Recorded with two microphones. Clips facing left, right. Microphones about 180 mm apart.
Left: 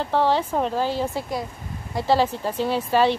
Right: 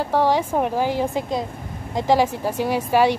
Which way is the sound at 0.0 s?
10° right (ahead or behind).